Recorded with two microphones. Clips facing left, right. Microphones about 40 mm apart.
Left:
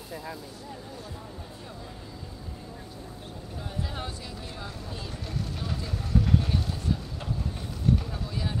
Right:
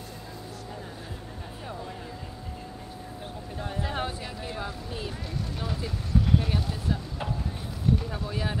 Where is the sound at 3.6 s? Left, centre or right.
Right.